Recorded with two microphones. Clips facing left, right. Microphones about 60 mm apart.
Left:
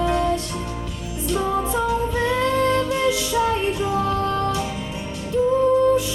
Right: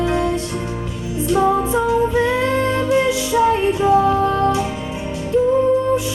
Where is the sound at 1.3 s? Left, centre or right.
Centre.